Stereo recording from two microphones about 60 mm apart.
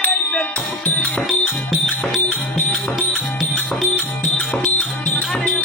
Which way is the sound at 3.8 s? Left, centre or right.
Left.